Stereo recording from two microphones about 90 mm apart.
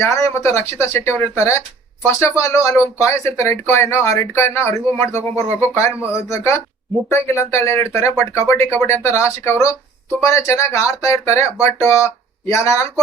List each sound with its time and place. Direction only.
0.0 s speech: 35° left (ahead or behind)